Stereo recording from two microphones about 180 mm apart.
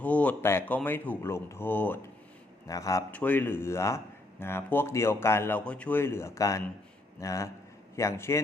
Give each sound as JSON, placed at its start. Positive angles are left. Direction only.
{"t": 0.0, "sound": "a man's voice", "side_deg": 10}